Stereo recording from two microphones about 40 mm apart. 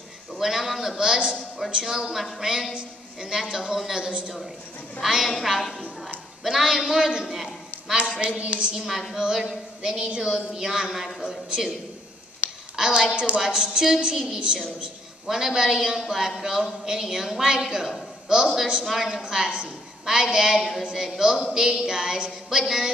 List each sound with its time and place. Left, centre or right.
0.4 s a woman's voice: centre
5.0 s a woman's voice: centre
6.4 s a woman's voice: centre
8.1 s a woman's voice: right
8.7 s a woman's voice: centre
12.4 s a sound: right
12.7 s a woman's voice: centre
19.2 s a woman's voice: right
20.5 s a woman's voice: centre
20.8 s a woman's voice: centre